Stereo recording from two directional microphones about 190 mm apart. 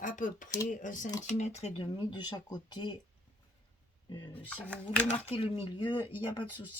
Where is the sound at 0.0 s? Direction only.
45° left (ahead or behind); by 2.9 s 20° left (ahead or behind).